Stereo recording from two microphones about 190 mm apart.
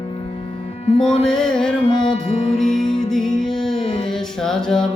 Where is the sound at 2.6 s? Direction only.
Centre (ahead or behind).